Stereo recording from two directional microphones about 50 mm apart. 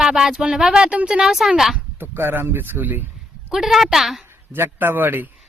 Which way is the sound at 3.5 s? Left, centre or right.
Centre.